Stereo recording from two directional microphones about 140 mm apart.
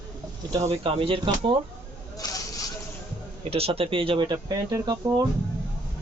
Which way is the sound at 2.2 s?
30° left (ahead or behind).